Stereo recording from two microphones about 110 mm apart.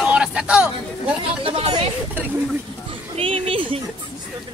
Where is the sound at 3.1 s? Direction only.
65° right (ahead or behind).